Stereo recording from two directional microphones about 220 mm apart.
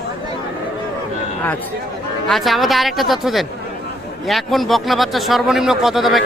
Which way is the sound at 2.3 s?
Centre (ahead or behind).